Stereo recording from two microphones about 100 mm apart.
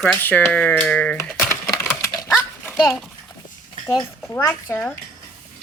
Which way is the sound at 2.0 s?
25° left (ahead or behind).